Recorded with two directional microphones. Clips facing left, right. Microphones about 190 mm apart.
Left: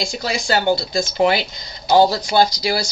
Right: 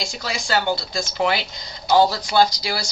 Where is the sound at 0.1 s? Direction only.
25° left (ahead or behind).